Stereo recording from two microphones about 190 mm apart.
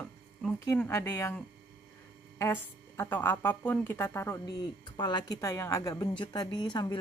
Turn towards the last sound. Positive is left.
turn(degrees=25)  # may be behind; listen again after turning